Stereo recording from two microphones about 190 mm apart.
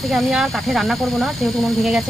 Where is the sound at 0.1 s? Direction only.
Centre (ahead or behind).